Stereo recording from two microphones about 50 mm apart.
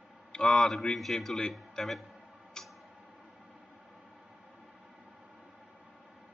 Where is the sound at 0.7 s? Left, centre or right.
Centre.